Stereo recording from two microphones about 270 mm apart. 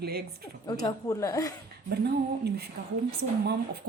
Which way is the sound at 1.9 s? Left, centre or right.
Right.